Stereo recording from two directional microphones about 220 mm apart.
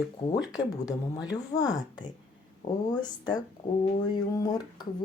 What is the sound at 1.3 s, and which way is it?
Speech, 15° left (ahead or behind).